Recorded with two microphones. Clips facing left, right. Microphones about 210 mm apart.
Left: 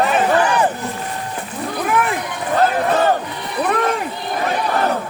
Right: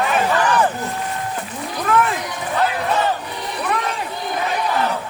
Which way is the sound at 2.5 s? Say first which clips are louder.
Left 4 dB; 45° left (ahead or behind).